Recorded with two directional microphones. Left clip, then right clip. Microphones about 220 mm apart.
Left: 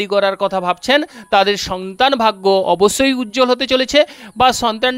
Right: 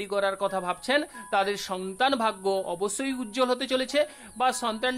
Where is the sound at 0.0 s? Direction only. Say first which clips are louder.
Left 11 dB; 40° left (ahead or behind).